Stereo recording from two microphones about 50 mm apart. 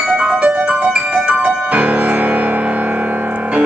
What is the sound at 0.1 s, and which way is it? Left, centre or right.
Music, right.